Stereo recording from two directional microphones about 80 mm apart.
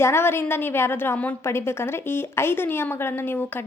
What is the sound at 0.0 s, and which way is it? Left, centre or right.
A woman's voice, left.